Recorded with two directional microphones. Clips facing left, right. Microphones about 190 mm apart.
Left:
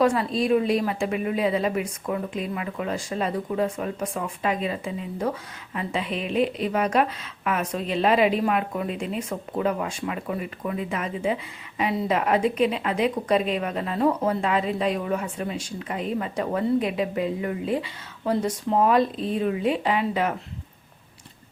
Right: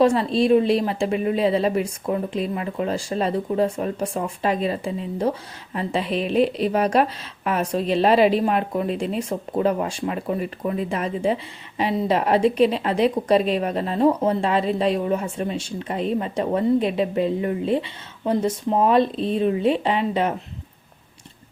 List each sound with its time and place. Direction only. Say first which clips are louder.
0.0 s a woman's voice: right 4 dB; 25° right (ahead or behind)